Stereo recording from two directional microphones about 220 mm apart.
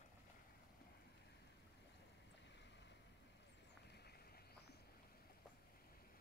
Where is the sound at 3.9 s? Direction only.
45° left (ahead or behind).